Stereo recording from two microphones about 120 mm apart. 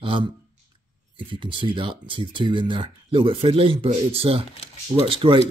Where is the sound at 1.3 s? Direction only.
45° right (ahead or behind).